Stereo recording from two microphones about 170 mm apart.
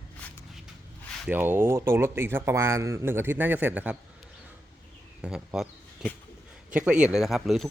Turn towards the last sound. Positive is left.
turn(degrees=0)  # may be behind; listen again after turning